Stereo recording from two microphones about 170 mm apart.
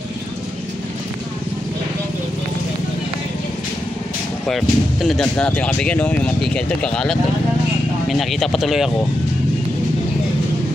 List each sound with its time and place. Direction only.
4.5 s speech: centre (ahead or behind)